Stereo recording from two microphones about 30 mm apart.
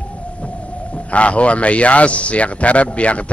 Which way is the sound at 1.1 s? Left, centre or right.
Left.